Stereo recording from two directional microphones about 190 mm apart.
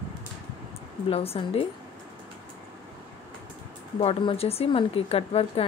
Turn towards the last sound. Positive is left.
turn(degrees=30)  # may be behind; listen again after turning